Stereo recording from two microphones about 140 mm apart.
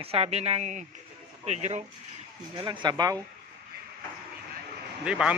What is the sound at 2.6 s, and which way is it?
Speech, 35° right (ahead or behind).